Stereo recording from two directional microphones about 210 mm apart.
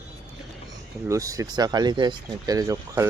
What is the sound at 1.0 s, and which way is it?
Speech, 15° right (ahead or behind).